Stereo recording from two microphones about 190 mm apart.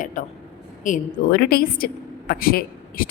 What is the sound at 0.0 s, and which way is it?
Speech, 40° left (ahead or behind).